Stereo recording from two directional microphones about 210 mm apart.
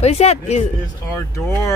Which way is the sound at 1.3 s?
15° left (ahead or behind).